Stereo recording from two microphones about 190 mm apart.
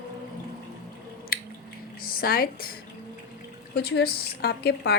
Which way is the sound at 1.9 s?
50° left (ahead or behind).